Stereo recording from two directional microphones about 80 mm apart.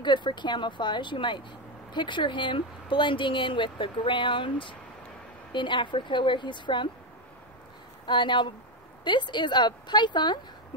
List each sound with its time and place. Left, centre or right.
0.0 s speech: left
8.1 s speech: left